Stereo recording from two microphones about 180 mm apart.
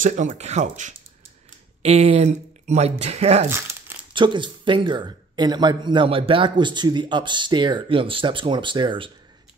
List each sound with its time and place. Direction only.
0.0 s speech: 45° right (ahead or behind); by 9.1 s 25° right (ahead or behind)